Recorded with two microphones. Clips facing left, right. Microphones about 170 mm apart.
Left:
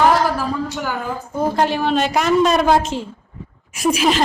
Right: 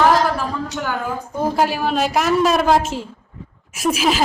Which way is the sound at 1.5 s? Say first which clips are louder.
Left 1 dB; 5° right (ahead or behind).